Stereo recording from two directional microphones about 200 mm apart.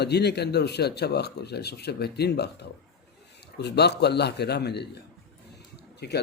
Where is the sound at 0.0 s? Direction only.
55° left (ahead or behind).